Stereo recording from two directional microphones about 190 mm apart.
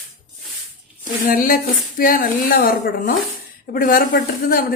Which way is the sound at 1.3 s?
50° left (ahead or behind).